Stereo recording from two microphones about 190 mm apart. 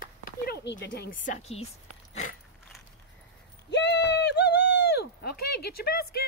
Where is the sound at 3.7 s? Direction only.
65° left (ahead or behind).